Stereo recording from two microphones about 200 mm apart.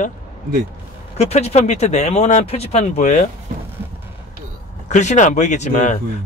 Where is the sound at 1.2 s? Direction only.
30° left (ahead or behind).